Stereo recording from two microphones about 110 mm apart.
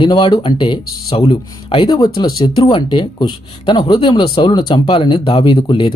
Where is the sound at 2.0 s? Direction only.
35° left (ahead or behind).